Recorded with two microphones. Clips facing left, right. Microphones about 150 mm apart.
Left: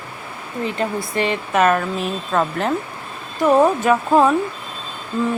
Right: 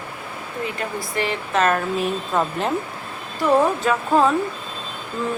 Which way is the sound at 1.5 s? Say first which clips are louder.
Left 3 dB; 10° left (ahead or behind).